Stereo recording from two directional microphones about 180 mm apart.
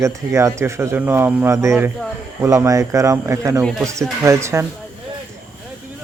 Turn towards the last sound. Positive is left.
turn(degrees=-15)  # may be behind; listen again after turning